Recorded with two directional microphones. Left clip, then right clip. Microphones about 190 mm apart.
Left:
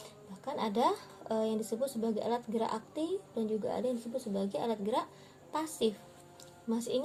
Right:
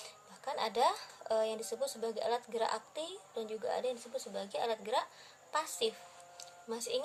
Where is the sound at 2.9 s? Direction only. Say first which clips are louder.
Left 6 dB; 55° right (ahead or behind).